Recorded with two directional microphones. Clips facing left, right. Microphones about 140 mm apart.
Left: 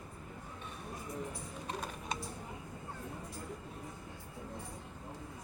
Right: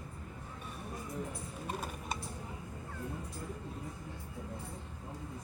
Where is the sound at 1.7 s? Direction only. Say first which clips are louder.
Right 1 dB; 5° right (ahead or behind).